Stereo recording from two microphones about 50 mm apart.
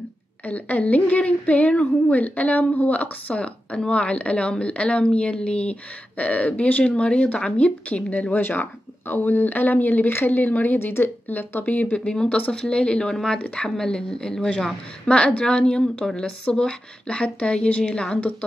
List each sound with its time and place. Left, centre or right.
0.5 s speech: left
8.4 s speech: left
12.0 s speech: centre
13.1 s speech: centre